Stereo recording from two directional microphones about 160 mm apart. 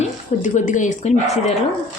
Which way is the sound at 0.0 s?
50° left (ahead or behind).